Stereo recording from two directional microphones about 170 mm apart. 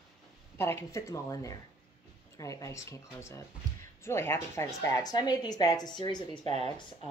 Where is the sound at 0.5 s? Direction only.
15° left (ahead or behind).